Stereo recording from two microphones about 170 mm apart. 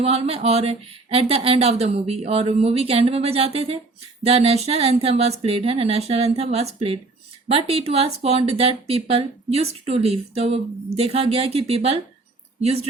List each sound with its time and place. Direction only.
0.0 s speech: 35° right (ahead or behind)